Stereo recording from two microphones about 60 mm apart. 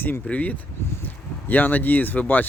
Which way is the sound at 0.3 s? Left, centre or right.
Left.